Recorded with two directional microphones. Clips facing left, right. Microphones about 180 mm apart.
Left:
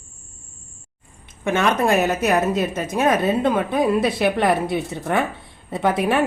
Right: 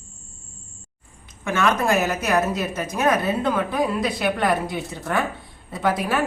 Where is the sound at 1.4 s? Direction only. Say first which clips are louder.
Left 2 dB; 25° left (ahead or behind).